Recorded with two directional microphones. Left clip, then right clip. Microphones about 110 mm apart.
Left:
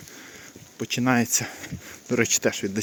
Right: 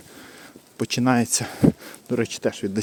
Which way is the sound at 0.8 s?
50° right (ahead or behind).